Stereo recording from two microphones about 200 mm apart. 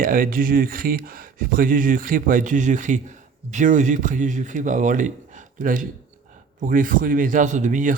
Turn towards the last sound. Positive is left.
turn(degrees=-40)  # may be behind; listen again after turning